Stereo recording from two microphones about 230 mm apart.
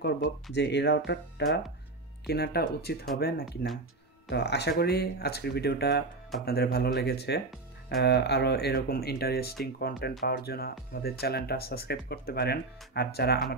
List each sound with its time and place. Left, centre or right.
0.0 s speech: left